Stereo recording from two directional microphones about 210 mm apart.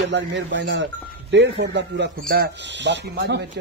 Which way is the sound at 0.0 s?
60° right (ahead or behind).